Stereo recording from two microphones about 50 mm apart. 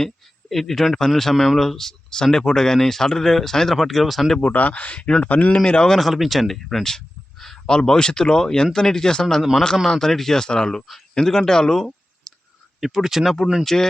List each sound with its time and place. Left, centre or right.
0.0 s speech: centre
4.4 s speech: left
5.5 s speech: centre
6.0 s speech: centre
9.2 s speech: centre
12.8 s speech: centre
13.7 s speech: centre